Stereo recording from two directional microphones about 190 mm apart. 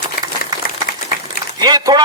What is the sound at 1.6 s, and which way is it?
Speech, 20° right (ahead or behind).